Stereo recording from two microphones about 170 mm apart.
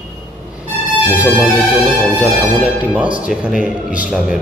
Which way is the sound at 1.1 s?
10° right (ahead or behind).